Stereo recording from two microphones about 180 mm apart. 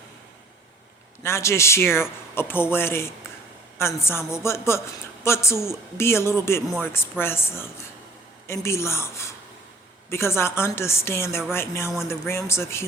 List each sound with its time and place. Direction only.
1.2 s a man's voice: 15° left (ahead or behind)